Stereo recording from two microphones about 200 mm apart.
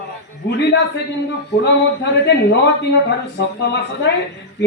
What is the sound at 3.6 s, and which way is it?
Speech, 55° left (ahead or behind).